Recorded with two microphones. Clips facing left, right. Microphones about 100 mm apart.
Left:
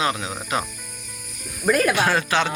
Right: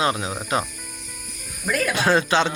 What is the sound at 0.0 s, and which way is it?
Speech, 30° right (ahead or behind).